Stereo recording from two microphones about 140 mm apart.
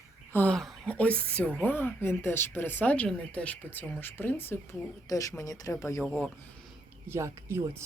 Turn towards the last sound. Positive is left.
turn(degrees=-20)  # may be behind; listen again after turning